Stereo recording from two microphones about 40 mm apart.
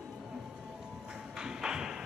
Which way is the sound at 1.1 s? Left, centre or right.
Centre.